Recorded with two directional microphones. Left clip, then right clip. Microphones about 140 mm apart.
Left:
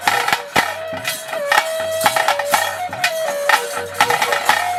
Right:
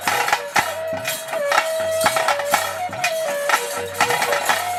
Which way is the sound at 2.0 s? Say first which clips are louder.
Left 5 dB; 30° left (ahead or behind).